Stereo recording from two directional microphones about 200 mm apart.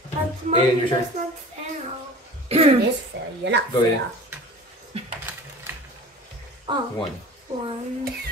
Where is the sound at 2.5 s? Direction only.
30° right (ahead or behind).